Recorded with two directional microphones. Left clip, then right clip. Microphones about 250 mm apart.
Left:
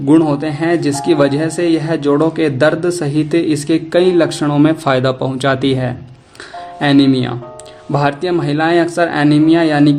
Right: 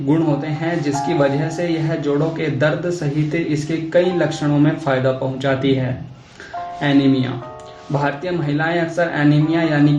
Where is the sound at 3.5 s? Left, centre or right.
Left.